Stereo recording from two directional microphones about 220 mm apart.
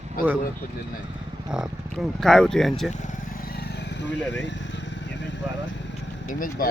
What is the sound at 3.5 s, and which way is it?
Vehicle, 50° left (ahead or behind).